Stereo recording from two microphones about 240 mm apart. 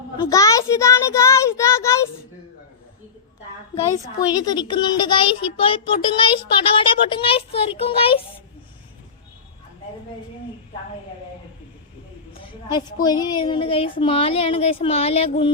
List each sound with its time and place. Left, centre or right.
0.2 s child singing: centre
4.4 s child singing: centre
12.4 s a sound: centre
13.1 s child singing: centre